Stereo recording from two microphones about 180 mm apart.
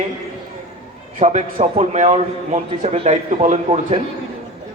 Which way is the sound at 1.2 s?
40° right (ahead or behind).